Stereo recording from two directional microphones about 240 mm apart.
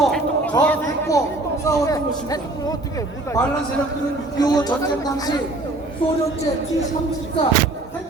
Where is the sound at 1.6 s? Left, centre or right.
Centre.